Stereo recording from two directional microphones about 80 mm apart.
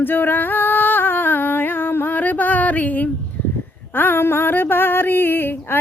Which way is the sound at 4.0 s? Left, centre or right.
Left.